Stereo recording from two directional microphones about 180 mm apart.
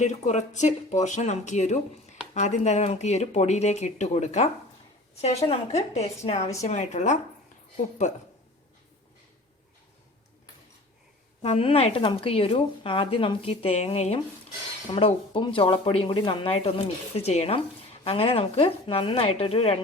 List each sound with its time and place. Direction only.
0.0 s speech: 40° left (ahead or behind)
11.4 s speech: 30° left (ahead or behind)